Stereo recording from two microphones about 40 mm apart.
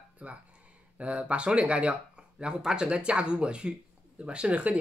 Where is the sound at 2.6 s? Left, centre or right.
Centre.